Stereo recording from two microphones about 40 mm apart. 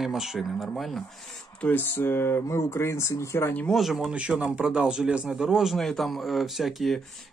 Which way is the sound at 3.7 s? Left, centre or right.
Centre.